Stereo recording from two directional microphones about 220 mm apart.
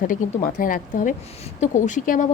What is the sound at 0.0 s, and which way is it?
A woman's voice, 35° left (ahead or behind).